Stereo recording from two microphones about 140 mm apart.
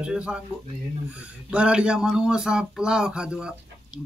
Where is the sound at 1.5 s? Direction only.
5° right (ahead or behind).